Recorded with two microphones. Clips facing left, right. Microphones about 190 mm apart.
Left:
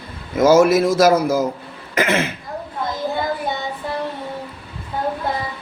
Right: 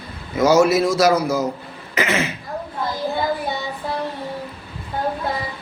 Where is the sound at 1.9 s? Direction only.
55° left (ahead or behind).